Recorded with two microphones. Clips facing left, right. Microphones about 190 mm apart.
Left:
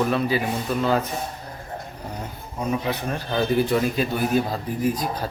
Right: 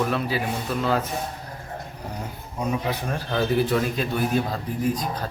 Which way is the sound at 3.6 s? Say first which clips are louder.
Left 2 dB; 5° left (ahead or behind).